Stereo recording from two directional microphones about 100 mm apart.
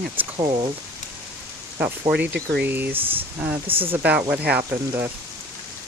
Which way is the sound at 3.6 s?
65° right (ahead or behind).